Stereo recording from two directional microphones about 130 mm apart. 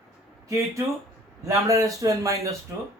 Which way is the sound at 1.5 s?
25° right (ahead or behind).